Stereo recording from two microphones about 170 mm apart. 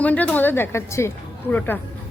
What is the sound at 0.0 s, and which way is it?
A woman's voice, 10° left (ahead or behind).